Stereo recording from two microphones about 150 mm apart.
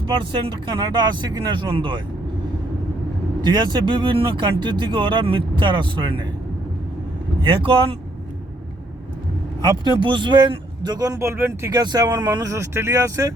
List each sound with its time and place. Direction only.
0.0 s speech: 35° right (ahead or behind)
3.4 s speech: 30° right (ahead or behind)
7.4 s speech: 35° right (ahead or behind)
9.6 s speech: 30° right (ahead or behind)